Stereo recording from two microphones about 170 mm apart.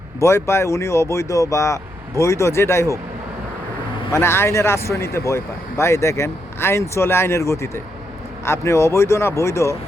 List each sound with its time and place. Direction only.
0.2 s speech: 15° left (ahead or behind)
4.1 s speech: 15° left (ahead or behind)